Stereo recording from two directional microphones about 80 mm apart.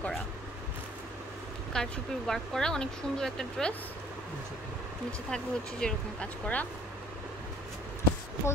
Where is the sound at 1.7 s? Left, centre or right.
Centre.